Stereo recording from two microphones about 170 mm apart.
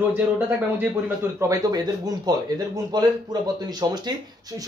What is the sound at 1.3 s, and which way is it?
Speech, 20° right (ahead or behind).